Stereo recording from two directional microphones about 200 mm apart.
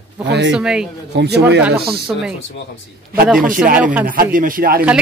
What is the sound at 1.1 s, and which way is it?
Speech, 55° right (ahead or behind).